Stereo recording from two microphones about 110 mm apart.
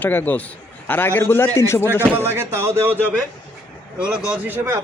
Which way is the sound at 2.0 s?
20° right (ahead or behind).